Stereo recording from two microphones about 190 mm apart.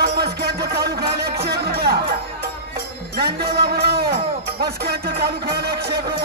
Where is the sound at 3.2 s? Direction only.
60° right (ahead or behind).